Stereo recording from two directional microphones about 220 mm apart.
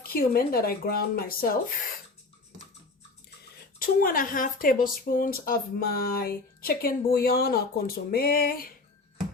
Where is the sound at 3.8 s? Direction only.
40° left (ahead or behind).